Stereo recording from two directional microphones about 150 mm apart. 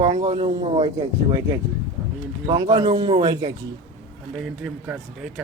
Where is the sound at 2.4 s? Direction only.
25° right (ahead or behind).